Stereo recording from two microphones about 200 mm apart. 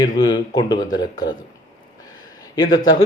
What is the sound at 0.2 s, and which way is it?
Speech, 20° left (ahead or behind).